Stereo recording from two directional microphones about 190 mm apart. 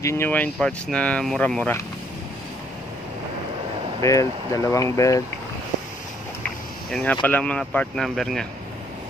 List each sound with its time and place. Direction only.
0.0 s speech: 15° left (ahead or behind)
4.0 s speech: 15° left (ahead or behind)
6.9 s speech: 5° left (ahead or behind)